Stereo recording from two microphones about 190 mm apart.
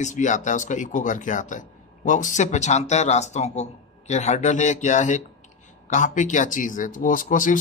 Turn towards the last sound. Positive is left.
turn(degrees=45)  # may be behind; listen again after turning